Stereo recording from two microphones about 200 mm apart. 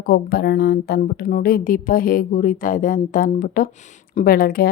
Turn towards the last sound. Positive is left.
turn(degrees=50)  # may be behind; listen again after turning